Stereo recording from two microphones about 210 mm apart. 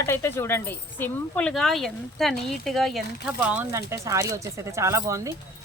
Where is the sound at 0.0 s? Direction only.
10° left (ahead or behind).